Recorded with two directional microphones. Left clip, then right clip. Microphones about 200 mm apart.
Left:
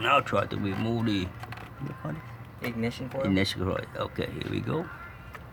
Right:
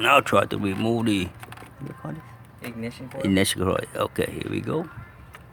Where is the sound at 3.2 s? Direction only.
45° right (ahead or behind).